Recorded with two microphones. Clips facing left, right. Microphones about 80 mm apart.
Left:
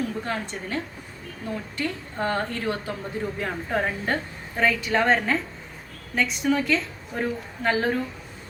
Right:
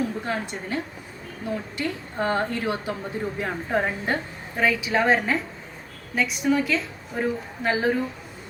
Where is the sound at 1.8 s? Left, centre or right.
Right.